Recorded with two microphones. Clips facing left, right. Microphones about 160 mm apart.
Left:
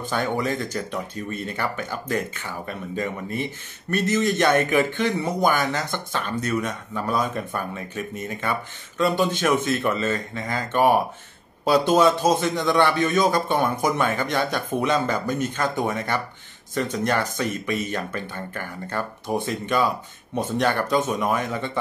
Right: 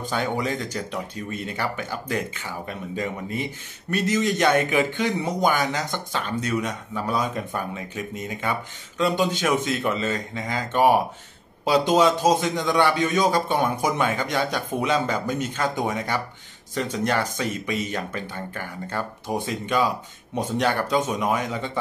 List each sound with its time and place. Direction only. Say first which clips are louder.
0.0 s a man's voice: left 1 dB; 15° right (ahead or behind)
1.1 s speech: left 1 dB; 50° left (ahead or behind)
1.5 s a man's voice: right 1 dB; 15° right (ahead or behind)
4.0 s a man's voice: even; 10° right (ahead or behind)
6.1 s speech: even; 50° left (ahead or behind)
6.6 s a man's voice: even; 15° right (ahead or behind)
15.2 s speech: left 2 dB; 50° left (ahead or behind)
15.5 s a man's voice: left 1 dB; 10° right (ahead or behind)